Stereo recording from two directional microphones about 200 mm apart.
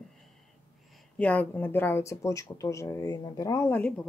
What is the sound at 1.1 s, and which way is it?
Speech, 5° left (ahead or behind).